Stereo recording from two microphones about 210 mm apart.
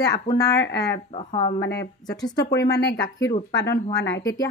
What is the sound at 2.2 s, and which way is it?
Speech, 20° left (ahead or behind).